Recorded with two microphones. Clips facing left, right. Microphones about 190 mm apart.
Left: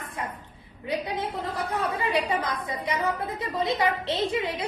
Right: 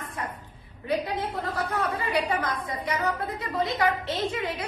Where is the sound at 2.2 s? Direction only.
20° left (ahead or behind).